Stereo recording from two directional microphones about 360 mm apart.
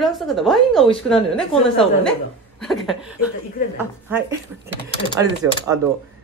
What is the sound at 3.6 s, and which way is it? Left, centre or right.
Speech, left.